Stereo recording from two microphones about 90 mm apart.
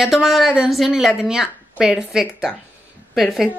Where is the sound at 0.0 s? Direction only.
5° right (ahead or behind).